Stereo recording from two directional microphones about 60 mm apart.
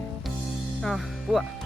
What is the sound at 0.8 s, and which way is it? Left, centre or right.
Speech, centre.